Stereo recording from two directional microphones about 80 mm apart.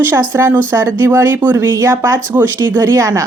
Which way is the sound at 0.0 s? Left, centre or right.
Right.